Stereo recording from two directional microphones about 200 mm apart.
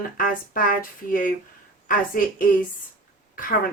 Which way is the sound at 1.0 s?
45° left (ahead or behind).